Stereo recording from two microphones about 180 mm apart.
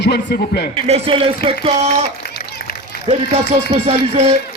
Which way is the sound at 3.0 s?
35° right (ahead or behind).